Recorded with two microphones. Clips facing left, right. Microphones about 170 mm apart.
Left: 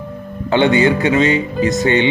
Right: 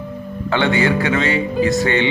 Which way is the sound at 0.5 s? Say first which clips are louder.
Left 4 dB; 20° left (ahead or behind).